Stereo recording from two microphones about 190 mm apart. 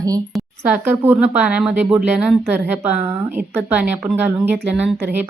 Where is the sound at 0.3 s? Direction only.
10° right (ahead or behind).